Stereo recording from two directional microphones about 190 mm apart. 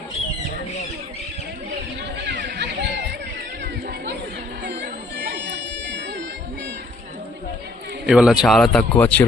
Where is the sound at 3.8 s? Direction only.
55° right (ahead or behind).